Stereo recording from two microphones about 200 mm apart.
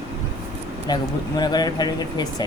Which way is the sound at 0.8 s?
20° left (ahead or behind).